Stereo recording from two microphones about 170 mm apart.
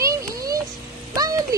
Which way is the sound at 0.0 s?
20° right (ahead or behind).